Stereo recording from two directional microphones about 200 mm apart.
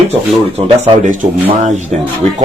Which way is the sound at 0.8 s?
40° right (ahead or behind).